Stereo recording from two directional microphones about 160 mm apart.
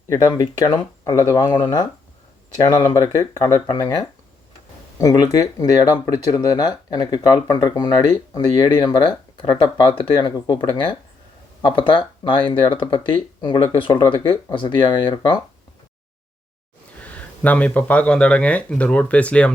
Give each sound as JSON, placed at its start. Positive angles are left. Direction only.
{"t": 0.1, "sound": "speech", "side_deg": 25}
{"t": 17.0, "sound": "speech", "side_deg": 10}